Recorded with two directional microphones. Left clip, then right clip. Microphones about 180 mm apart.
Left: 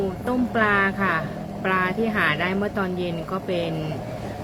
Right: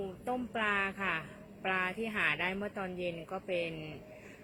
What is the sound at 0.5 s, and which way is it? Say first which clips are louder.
A woman's voice: left 13 dB; 25° right (ahead or behind).